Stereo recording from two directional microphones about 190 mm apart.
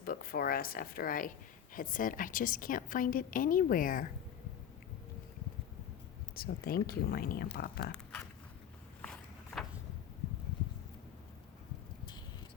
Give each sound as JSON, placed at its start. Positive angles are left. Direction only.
{"t": 0.0, "sound": "a woman's voice", "side_deg": 50}
{"t": 6.3, "sound": "a woman's voice", "side_deg": 50}
{"t": 7.9, "sound": "a sound", "side_deg": 5}
{"t": 9.0, "sound": "vehicle", "side_deg": 5}